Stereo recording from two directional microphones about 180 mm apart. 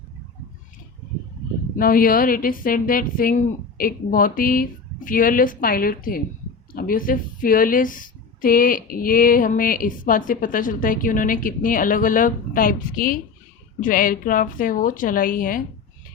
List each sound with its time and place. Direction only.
1.7 s a woman's voice: 50° left (ahead or behind)